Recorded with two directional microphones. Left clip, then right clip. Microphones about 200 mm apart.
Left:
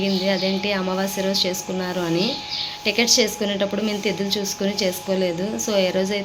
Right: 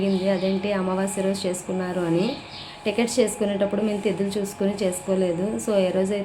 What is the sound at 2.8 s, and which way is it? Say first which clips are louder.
Speech: left 3 dB; 5° right (ahead or behind).